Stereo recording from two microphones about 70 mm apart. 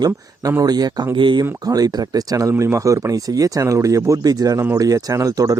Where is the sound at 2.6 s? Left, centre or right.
Right.